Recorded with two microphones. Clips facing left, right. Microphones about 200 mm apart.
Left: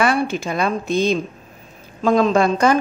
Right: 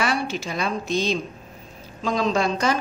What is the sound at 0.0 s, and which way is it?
A woman's voice, 55° left (ahead or behind).